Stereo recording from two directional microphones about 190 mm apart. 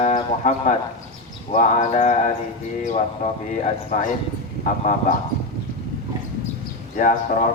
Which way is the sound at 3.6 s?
40° left (ahead or behind).